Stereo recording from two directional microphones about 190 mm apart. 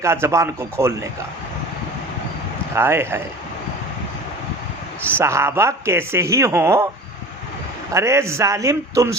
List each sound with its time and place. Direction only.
0.0 s speech: 15° right (ahead or behind)
2.7 s speech: 15° right (ahead or behind)
5.1 s speech: 15° right (ahead or behind)
7.9 s speech: 15° right (ahead or behind)